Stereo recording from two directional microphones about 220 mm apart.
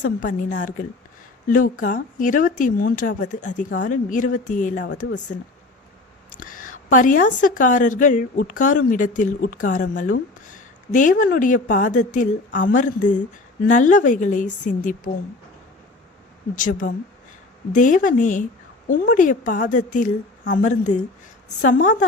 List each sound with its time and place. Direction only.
0.0 s speech: 35° left (ahead or behind)
6.4 s speech: 40° left (ahead or behind)
16.6 s speech: 40° left (ahead or behind)